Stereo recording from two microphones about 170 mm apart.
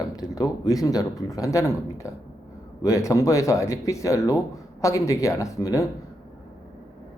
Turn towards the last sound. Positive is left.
turn(degrees=20)  # may be behind; listen again after turning